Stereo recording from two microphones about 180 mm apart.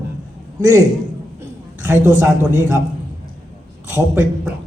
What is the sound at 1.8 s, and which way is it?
Speech, 15° right (ahead or behind).